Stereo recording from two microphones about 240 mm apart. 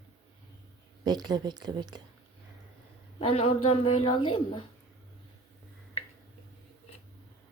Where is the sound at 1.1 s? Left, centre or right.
Centre.